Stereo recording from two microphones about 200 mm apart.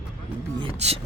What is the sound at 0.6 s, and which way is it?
Speech, 30° right (ahead or behind).